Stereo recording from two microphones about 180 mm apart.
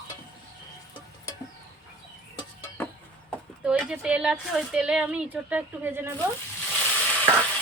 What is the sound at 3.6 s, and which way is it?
A woman's voice, 5° right (ahead or behind).